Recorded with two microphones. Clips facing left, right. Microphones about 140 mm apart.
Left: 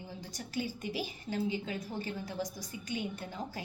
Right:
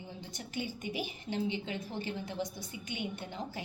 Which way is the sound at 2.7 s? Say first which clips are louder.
Left 1 dB; 40° left (ahead or behind).